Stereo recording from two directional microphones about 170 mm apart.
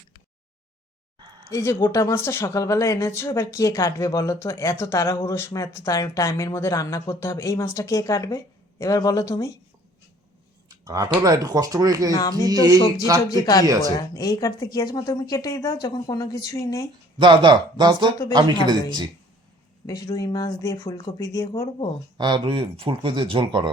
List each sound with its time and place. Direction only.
1.5 s speech: 15° left (ahead or behind)
10.7 s a sound: 20° right (ahead or behind)
11.2 s speech: 20° right (ahead or behind)
13.3 s speech: 20° left (ahead or behind)
17.2 s speech: 25° right (ahead or behind)
19.9 s speech: 20° left (ahead or behind)
22.2 s speech: 30° right (ahead or behind)